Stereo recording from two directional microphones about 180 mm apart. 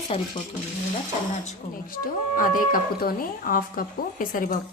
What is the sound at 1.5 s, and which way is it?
Speech, 50° left (ahead or behind).